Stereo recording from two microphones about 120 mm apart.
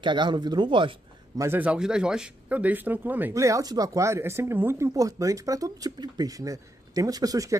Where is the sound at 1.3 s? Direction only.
25° right (ahead or behind).